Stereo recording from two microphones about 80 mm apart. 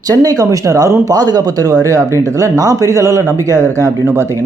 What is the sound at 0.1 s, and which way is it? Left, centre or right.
Speech, right.